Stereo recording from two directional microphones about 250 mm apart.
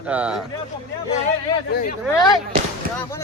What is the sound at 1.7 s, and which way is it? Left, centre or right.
Speech, left.